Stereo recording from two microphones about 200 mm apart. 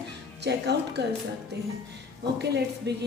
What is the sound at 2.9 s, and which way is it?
Speech, 60° right (ahead or behind).